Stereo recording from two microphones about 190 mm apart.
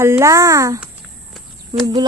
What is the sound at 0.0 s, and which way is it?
Speech, 15° right (ahead or behind).